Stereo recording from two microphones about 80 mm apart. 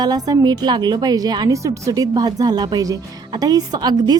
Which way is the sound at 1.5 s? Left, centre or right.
Right.